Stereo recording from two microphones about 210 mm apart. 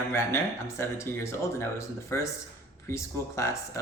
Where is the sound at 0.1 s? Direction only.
10° left (ahead or behind).